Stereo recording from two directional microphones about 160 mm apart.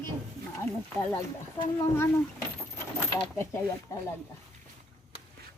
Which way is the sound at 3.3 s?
15° left (ahead or behind).